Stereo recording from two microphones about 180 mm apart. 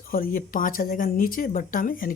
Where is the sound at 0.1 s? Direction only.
50° left (ahead or behind).